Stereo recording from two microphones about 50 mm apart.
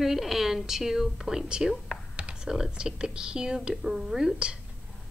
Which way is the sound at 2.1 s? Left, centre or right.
Right.